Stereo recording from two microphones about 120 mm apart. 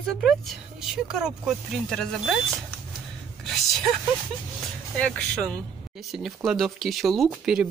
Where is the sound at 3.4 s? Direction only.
Centre (ahead or behind).